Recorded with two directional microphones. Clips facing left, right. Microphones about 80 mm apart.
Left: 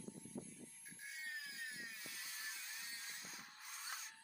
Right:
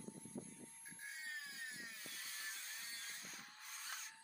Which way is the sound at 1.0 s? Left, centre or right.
Right.